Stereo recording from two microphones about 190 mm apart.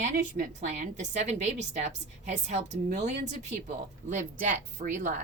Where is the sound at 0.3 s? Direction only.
40° right (ahead or behind).